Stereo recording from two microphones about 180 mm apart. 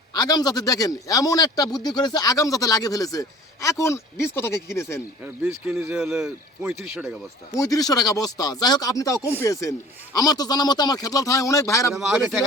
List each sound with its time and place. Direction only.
0.1 s a man's voice: 20° left (ahead or behind)
5.2 s speech: 10° right (ahead or behind)
7.5 s a man's voice: 20° left (ahead or behind)
11.9 s speech: 5° right (ahead or behind)